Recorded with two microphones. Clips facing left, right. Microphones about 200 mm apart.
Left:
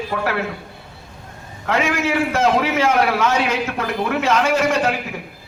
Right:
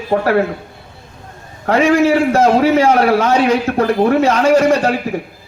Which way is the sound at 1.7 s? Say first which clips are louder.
Right 8 dB; 35° right (ahead or behind).